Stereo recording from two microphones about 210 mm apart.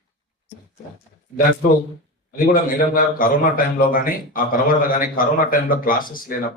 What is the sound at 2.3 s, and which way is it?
Speech, 45° left (ahead or behind).